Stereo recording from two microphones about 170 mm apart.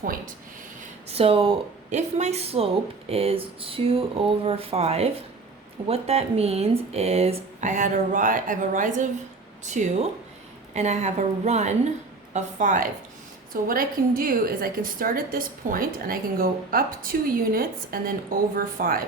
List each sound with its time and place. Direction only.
1.0 s a woman's voice: 35° right (ahead or behind); by 19.0 s 55° right (ahead or behind)